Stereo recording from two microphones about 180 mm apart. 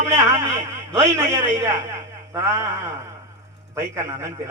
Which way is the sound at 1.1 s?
15° right (ahead or behind).